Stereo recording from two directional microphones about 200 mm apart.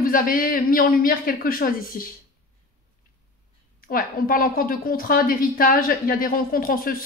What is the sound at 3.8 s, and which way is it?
A woman's voice, 45° left (ahead or behind).